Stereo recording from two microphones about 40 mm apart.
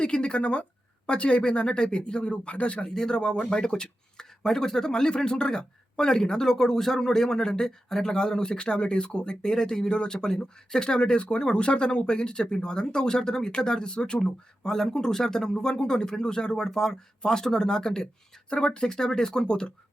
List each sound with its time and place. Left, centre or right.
0.0 s speech: left
2.9 s speech: centre